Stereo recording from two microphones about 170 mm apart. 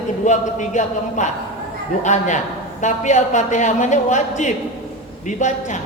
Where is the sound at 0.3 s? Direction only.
45° left (ahead or behind).